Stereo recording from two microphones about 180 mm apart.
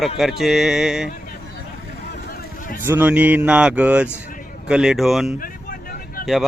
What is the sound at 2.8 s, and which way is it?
Speech, 10° right (ahead or behind).